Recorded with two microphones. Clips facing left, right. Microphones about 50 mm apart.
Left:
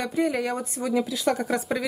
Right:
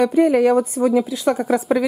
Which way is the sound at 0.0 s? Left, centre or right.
Right.